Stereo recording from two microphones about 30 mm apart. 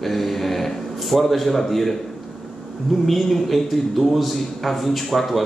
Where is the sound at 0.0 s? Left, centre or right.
Centre.